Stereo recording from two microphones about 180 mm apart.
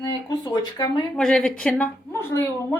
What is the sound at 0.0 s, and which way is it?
Speech, 20° left (ahead or behind).